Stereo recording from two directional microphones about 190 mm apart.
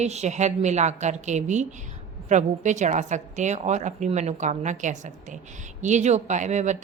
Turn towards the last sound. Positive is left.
turn(degrees=-40)  # may be behind; listen again after turning